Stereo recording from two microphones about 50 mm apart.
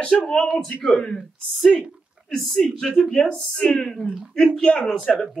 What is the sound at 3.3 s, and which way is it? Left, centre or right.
A man's voice, centre.